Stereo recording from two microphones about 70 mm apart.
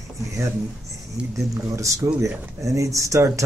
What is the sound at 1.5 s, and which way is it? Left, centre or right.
Speech, right.